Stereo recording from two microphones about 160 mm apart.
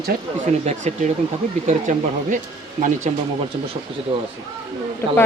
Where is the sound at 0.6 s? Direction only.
50° right (ahead or behind).